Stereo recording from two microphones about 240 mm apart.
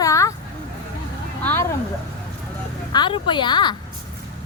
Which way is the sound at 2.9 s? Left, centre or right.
Centre.